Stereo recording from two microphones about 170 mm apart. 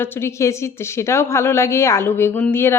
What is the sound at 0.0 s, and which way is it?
Speech, 15° left (ahead or behind).